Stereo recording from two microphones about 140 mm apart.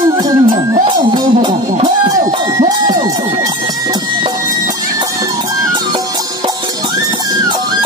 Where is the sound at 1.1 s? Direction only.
30° right (ahead or behind).